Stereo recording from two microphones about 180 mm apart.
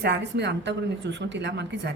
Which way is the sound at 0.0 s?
70° right (ahead or behind).